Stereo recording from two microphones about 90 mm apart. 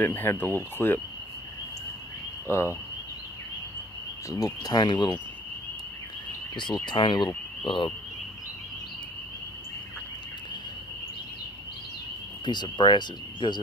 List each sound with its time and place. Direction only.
0.0 s speech: 25° left (ahead or behind)
2.4 s speech: 30° left (ahead or behind)
4.3 s speech: 40° left (ahead or behind); by 5.1 s 55° left (ahead or behind)
6.9 s speech: 60° left (ahead or behind)
12.4 s speech: 55° left (ahead or behind)